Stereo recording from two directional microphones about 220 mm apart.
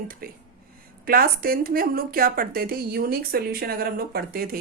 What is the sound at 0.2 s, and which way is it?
A woman's voice, 40° right (ahead or behind).